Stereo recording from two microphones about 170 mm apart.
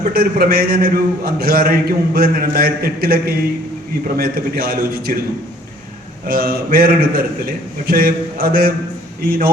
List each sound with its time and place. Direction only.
0.0 s a man's voice: 60° right (ahead or behind)
6.2 s a man's voice: 60° right (ahead or behind)